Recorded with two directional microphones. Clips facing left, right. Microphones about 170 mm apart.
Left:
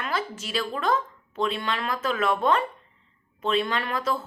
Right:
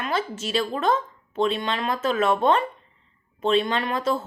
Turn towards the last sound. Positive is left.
turn(degrees=-25)  # may be behind; listen again after turning